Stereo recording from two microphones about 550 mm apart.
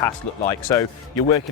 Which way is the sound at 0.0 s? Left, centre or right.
Centre.